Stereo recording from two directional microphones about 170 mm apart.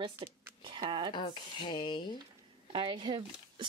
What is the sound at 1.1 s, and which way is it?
Speech, 30° left (ahead or behind).